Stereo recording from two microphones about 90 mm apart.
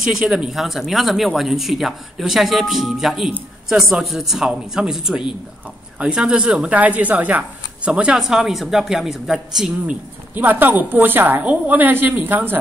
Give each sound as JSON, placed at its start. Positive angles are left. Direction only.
{"t": 0.0, "sound": "speech", "side_deg": -5}
{"t": 9.8, "sound": "a woman's voice", "side_deg": -20}